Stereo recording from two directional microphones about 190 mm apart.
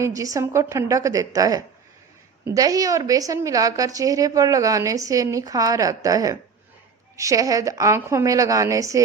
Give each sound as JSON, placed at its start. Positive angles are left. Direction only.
{"t": 0.0, "sound": "a woman's voice", "side_deg": -15}